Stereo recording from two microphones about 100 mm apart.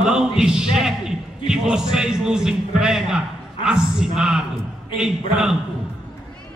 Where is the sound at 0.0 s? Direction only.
5° right (ahead or behind).